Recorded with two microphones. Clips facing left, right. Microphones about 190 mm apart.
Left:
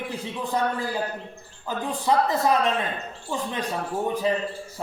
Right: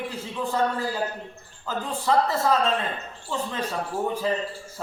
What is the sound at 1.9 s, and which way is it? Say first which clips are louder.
A man's voice: even; 15° left (ahead or behind).